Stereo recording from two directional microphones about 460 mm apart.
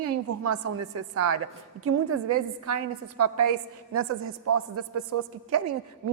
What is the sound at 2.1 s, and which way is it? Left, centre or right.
A woman's voice, right.